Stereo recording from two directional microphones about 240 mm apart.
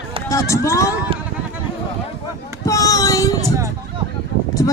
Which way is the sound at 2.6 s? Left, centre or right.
Centre.